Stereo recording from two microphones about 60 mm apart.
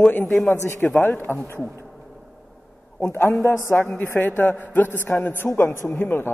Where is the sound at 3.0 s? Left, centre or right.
Left.